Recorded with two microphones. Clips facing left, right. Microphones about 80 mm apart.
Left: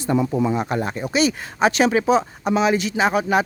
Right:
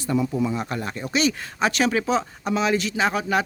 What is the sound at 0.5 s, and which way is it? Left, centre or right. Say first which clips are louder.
Speech: left 5 dB; left.